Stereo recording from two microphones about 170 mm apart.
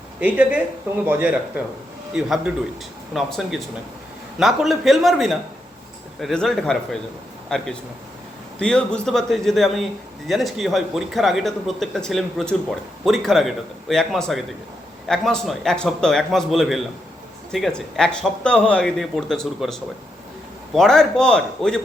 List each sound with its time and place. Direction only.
0.2 s speech: 10° right (ahead or behind)